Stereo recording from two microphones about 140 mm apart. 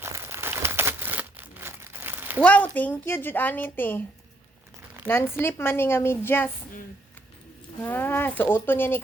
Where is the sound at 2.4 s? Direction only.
10° left (ahead or behind).